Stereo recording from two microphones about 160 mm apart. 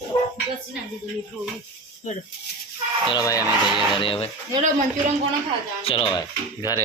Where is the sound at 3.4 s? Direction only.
Centre (ahead or behind).